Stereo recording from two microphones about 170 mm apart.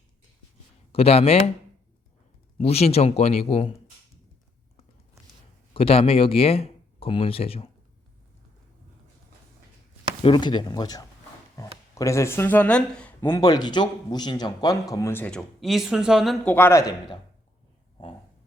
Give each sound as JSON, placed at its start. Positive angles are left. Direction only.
{"t": 0.9, "sound": "speech", "side_deg": 35}
{"t": 2.6, "sound": "speech", "side_deg": 35}
{"t": 5.7, "sound": "speech", "side_deg": 35}
{"t": 10.2, "sound": "speech", "side_deg": 25}